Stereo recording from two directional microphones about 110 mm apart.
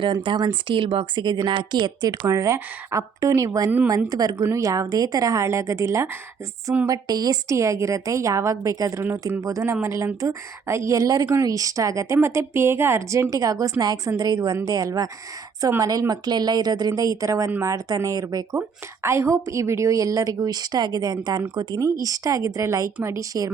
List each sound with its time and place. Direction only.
0.0 s speech: 50° right (ahead or behind)
2.0 s a woman's voice: 30° right (ahead or behind)